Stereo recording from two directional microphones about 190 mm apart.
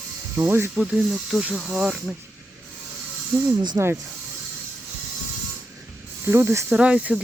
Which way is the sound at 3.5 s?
25° right (ahead or behind).